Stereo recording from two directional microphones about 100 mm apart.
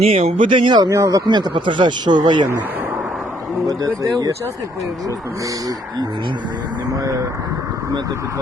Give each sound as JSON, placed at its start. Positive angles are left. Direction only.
{"t": 0.0, "sound": "speech", "side_deg": -85}
{"t": 0.5, "sound": "speech", "side_deg": -55}
{"t": 0.8, "sound": "speech", "side_deg": -30}
{"t": 1.3, "sound": "speech", "side_deg": -50}
{"t": 3.7, "sound": "speech", "side_deg": -40}